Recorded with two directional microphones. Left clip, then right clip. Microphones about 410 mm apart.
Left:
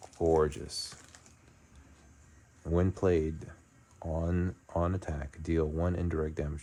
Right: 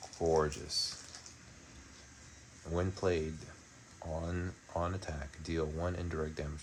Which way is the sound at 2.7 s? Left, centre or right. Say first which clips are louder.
Left 5 dB; centre.